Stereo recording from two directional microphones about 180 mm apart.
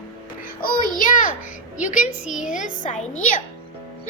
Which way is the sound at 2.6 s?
45° left (ahead or behind).